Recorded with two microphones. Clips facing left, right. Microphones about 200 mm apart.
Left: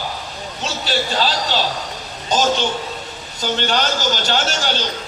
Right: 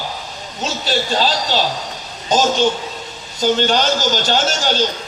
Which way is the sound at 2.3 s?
40° right (ahead or behind).